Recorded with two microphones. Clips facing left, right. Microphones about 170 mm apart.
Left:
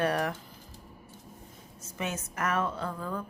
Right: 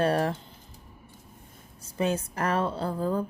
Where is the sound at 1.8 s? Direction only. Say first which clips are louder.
Right 8 dB; 35° right (ahead or behind).